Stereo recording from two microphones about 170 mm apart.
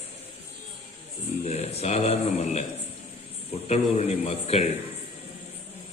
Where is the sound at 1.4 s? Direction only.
40° left (ahead or behind).